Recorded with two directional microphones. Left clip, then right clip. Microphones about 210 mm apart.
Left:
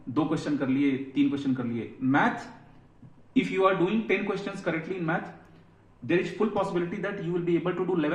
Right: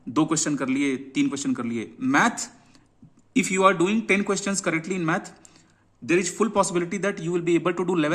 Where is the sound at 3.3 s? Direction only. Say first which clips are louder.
Right 4 dB; 55° right (ahead or behind).